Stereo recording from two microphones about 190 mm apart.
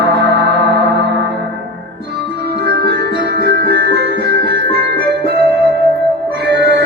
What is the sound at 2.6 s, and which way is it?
Music, 60° right (ahead or behind).